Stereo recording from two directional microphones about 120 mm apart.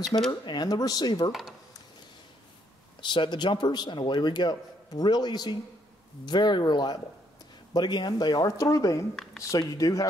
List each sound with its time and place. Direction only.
0.3 s a man's voice: 35° left (ahead or behind)
3.0 s a man's voice: 40° left (ahead or behind)
9.1 s speech: 5° left (ahead or behind)
9.4 s speech: 30° left (ahead or behind)